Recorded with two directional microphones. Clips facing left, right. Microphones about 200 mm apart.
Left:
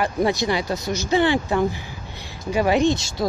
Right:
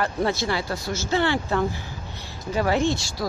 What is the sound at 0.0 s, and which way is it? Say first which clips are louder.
Speech: left 3 dB; 15° left (ahead or behind).